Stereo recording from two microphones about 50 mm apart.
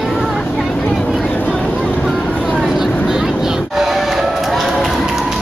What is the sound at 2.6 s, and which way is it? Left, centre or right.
Vehicle, centre.